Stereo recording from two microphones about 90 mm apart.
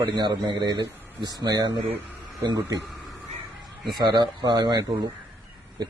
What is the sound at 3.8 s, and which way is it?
Speech, 55° right (ahead or behind).